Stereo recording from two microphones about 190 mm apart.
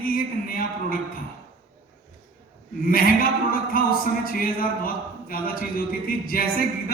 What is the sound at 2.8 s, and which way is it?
Speech, 50° left (ahead or behind).